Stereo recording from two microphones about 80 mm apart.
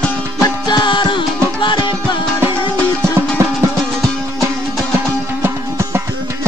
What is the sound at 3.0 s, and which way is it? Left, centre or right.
Music, right.